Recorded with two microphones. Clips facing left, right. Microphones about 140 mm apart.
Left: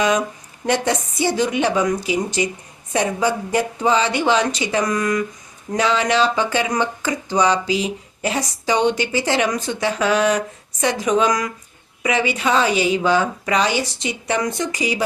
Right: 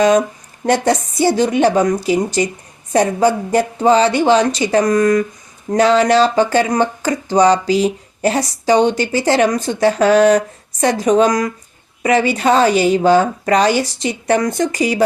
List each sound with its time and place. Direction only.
0.0 s speech: 40° right (ahead or behind)